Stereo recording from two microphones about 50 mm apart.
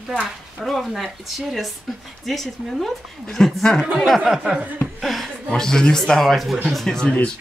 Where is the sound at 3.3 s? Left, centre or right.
Centre.